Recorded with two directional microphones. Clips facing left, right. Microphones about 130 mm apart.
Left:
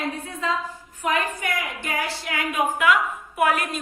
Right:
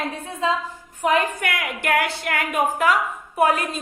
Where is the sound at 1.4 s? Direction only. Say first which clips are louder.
Right 2 dB; 60° right (ahead or behind).